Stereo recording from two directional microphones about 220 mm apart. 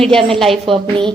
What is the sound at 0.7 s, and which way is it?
Speech, 25° right (ahead or behind).